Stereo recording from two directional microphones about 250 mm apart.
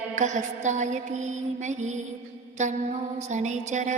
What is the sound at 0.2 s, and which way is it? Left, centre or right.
Music, right.